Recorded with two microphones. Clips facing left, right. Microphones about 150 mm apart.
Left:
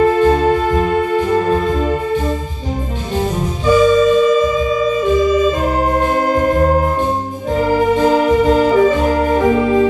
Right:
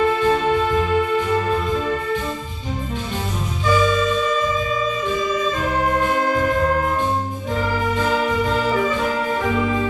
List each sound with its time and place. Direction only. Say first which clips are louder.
0.0 s music: left 6 dB; 40° left (ahead or behind)
3.7 s music: left 8 dB; 40° left (ahead or behind)
5.9 s music: left 4 dB; 40° left (ahead or behind)